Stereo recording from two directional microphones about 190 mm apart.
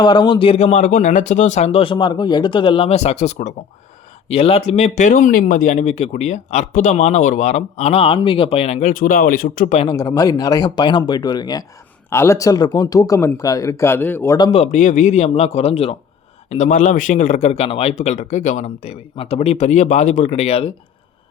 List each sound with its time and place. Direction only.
0.0 s speech: 25° left (ahead or behind)
8.9 s speech: 50° left (ahead or behind)
9.8 s speech: 20° left (ahead or behind)
14.6 s speech: 40° left (ahead or behind)